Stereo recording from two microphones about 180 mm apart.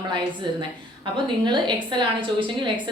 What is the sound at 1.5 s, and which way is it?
Speech, 25° right (ahead or behind).